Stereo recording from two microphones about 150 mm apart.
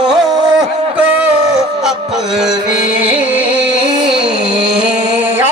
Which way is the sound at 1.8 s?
Centre (ahead or behind).